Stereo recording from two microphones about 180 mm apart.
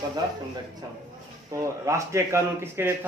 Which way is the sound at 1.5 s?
15° right (ahead or behind).